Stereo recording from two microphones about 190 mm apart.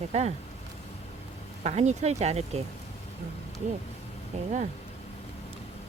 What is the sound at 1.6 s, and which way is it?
Speech, 35° right (ahead or behind).